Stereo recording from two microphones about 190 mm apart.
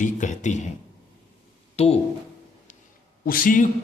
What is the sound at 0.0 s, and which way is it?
Speech, 40° left (ahead or behind).